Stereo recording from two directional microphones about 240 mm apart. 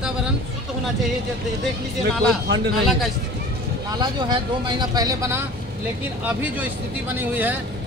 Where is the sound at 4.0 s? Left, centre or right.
Centre.